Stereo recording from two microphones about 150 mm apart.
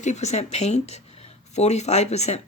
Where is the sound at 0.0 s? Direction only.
50° left (ahead or behind).